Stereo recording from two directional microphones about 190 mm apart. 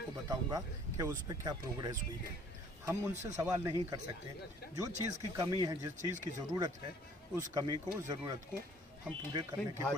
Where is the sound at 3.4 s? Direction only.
15° right (ahead or behind).